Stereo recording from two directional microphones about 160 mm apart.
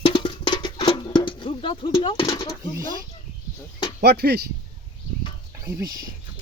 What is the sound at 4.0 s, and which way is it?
Speech, 85° right.